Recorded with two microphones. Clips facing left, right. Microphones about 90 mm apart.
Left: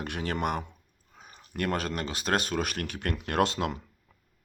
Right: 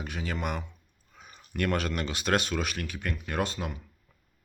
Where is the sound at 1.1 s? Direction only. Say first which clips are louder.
Right 1 dB; 35° left (ahead or behind); by 3.8 s 80° left.